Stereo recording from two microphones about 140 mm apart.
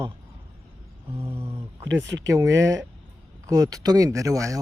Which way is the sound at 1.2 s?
20° right (ahead or behind).